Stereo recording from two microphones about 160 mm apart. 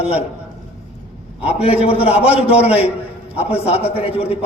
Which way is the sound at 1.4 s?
40° left (ahead or behind).